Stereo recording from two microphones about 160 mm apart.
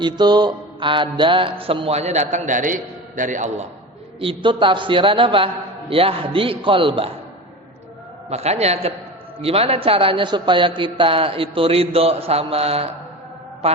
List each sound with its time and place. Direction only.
0.0 s mantra: 25° right (ahead or behind); by 3.7 s 50° right (ahead or behind)
4.2 s mantra: 35° right (ahead or behind)
8.3 s mantra: 40° right (ahead or behind)